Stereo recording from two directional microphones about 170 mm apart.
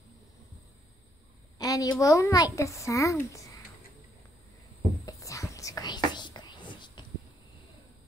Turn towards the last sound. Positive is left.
turn(degrees=25)  # may be behind; listen again after turning